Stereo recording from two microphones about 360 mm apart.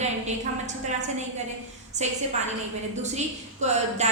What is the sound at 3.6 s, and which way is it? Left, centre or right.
Speech, centre.